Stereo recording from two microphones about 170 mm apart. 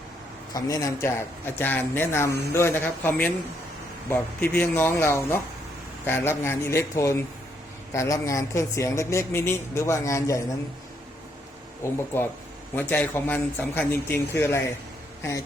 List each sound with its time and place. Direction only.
0.5 s speech: 20° left (ahead or behind)
12.1 s speech: 15° left (ahead or behind)